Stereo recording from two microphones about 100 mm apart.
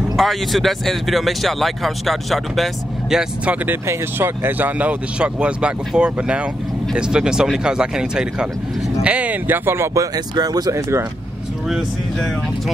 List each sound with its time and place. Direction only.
0.1 s speech: centre (ahead or behind); by 3.7 s 15° right (ahead or behind)
3.8 s speech: 25° right (ahead or behind)
10.1 s speech: 40° right (ahead or behind)